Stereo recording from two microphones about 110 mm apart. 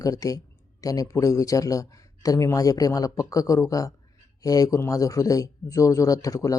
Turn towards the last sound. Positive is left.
turn(degrees=30)  # may be behind; listen again after turning